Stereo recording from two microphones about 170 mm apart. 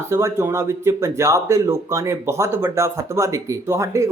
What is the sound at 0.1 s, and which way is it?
Speech, 15° right (ahead or behind).